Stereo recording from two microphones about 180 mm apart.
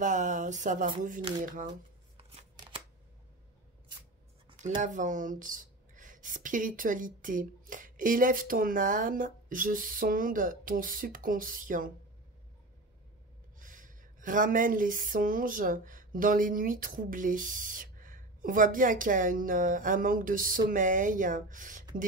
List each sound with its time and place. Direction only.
0.0 s speech: 45° right (ahead or behind)
1.7 s shuffling cards: 35° right (ahead or behind)
4.6 s speech: 45° right (ahead or behind)
13.6 s speech: 45° right (ahead or behind)